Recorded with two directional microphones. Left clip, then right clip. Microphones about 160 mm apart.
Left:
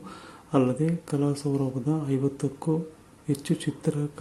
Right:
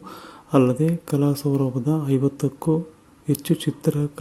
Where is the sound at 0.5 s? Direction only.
30° right (ahead or behind).